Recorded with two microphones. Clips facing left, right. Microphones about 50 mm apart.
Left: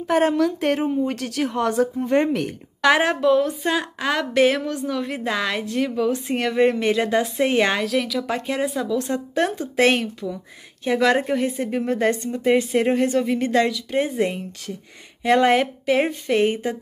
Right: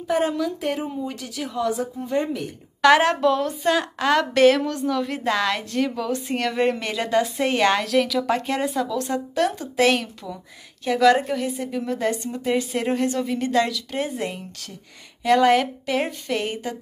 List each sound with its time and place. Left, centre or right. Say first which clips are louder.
0.4 s speech: left 5 dB; left
2.8 s a woman's voice: right 2 dB; centre
7.8 s speech: right 2 dB; centre
8.9 s a woman's voice: left 1 dB; left
12.4 s a woman's voice: left 5 dB; left